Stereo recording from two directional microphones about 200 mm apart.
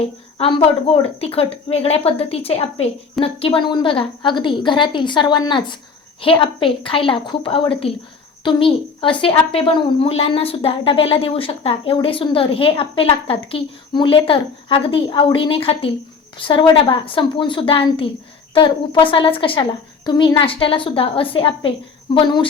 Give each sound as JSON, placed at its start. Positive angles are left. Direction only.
{"t": 0.0, "sound": "a woman's voice", "side_deg": 30}